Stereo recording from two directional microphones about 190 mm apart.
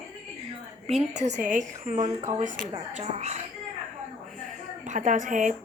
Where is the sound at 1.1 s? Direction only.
40° right (ahead or behind).